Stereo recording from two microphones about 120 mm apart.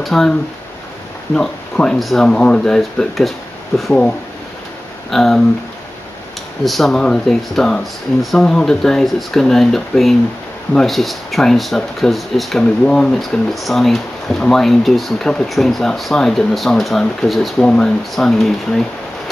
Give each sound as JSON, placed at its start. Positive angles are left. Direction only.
{"t": 0.0, "sound": "speech", "side_deg": 5}
{"t": 5.1, "sound": "speech", "side_deg": 0}
{"t": 6.6, "sound": "speech", "side_deg": 0}